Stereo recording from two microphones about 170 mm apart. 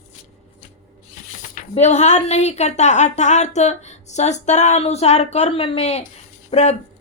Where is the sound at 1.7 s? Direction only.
40° left (ahead or behind).